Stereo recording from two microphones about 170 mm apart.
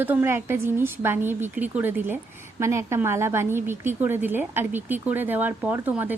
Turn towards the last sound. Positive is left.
turn(degrees=-10)  # may be behind; listen again after turning